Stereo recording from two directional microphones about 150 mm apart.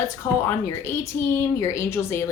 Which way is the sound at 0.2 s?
20° left (ahead or behind).